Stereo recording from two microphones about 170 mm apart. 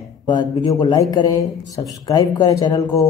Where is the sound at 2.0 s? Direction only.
20° left (ahead or behind).